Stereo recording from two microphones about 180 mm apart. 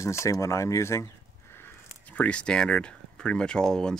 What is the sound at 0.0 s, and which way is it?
Speech, 15° left (ahead or behind).